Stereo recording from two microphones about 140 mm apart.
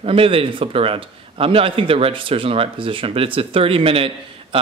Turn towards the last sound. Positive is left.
turn(degrees=-40)  # may be behind; listen again after turning